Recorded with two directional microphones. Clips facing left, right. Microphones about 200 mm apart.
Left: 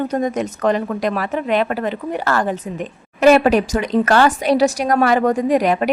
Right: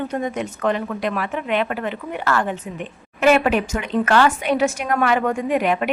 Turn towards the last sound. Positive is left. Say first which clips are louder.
# left 4 dB
turn(degrees=40)  # may be behind; listen again after turning